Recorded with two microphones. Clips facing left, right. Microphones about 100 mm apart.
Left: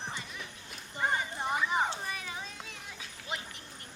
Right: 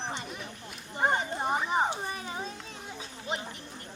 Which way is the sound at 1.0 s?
30° right (ahead or behind).